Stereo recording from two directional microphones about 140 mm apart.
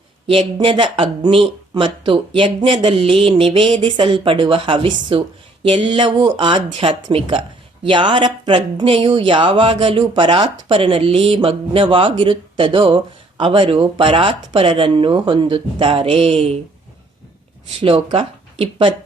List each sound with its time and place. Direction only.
0.3 s speech: 40° right (ahead or behind)
17.8 s speech: 40° right (ahead or behind)